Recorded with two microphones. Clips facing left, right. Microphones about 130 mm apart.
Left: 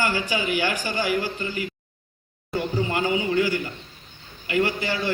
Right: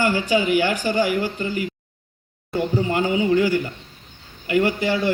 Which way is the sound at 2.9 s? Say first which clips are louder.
Right 4 dB; 35° right (ahead or behind).